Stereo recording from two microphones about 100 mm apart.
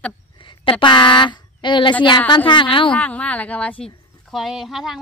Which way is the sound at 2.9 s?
15° left (ahead or behind).